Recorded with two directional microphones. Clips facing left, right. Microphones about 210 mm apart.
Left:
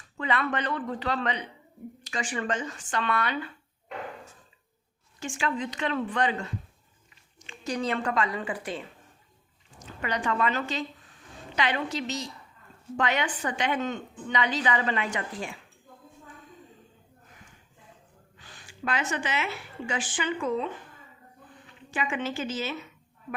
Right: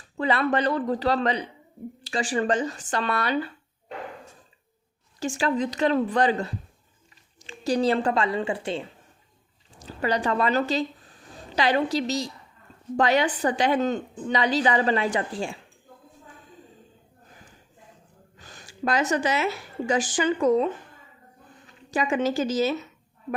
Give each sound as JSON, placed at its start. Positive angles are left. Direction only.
{"t": 0.2, "sound": "a woman's voice", "side_deg": -35}
{"t": 5.2, "sound": "a woman's voice", "side_deg": -40}
{"t": 18.3, "sound": "a woman's voice", "side_deg": -45}
{"t": 21.8, "sound": "a woman's voice", "side_deg": -40}